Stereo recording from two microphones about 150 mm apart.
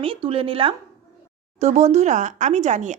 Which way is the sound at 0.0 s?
35° right (ahead or behind).